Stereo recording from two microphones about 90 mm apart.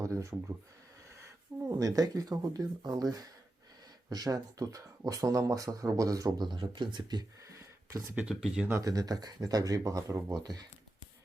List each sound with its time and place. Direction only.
0.0 s speech: 35° right (ahead or behind)
1.6 s speech: 40° right (ahead or behind); by 7.3 s 55° right (ahead or behind)
7.4 s a sound: 35° right (ahead or behind)
8.1 s speech: 10° right (ahead or behind)
8.8 s speech: 45° right (ahead or behind)